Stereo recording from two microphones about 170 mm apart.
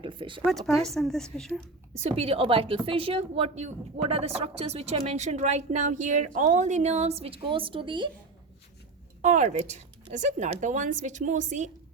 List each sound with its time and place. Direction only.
0.0 s speech: 30° right (ahead or behind)
0.7 s a woman's voice: centre (ahead or behind)
2.0 s a woman's voice: 35° right (ahead or behind)
9.2 s a woman's voice: 45° right (ahead or behind)